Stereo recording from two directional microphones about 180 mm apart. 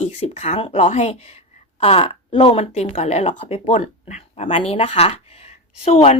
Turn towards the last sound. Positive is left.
turn(degrees=35)  # may be behind; listen again after turning